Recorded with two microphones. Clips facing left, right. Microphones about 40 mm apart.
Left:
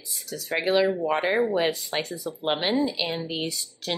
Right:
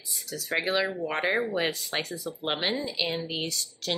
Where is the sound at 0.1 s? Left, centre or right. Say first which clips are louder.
Left 1 dB; centre.